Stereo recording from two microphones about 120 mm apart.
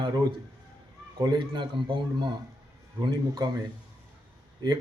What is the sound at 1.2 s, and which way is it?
Speech, 40° right (ahead or behind).